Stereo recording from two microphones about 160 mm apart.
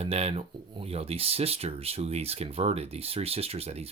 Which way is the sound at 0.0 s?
40° right (ahead or behind).